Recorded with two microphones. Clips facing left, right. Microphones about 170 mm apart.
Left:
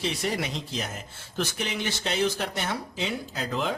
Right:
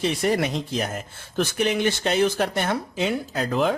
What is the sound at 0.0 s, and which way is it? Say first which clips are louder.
Speech: right 7 dB; 55° right (ahead or behind).